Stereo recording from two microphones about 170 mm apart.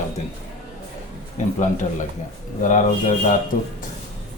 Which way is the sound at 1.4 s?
45° left (ahead or behind).